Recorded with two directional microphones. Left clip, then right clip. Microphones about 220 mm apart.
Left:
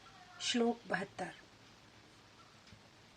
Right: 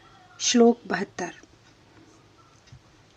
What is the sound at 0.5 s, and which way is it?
Speech, 40° right (ahead or behind).